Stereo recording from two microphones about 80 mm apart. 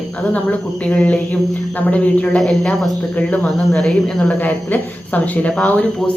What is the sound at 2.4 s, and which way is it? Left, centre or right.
A woman's voice, centre.